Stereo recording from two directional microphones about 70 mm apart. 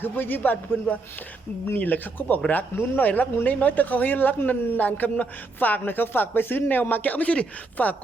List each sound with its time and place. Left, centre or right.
0.0 s a man's voice: left